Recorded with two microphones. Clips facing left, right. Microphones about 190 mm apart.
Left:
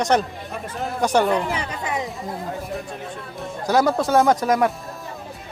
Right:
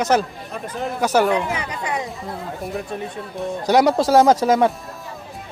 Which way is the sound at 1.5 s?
25° left (ahead or behind).